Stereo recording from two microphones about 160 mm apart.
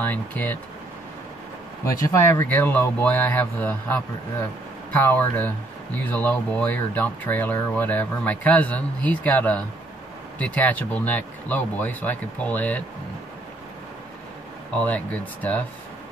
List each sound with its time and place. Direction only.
0.0 s speech: 10° left (ahead or behind)
1.9 s speech: 20° left (ahead or behind)
14.7 s speech: 10° left (ahead or behind)